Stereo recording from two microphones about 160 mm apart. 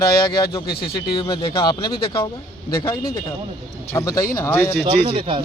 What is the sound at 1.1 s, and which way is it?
Speech, 30° left (ahead or behind).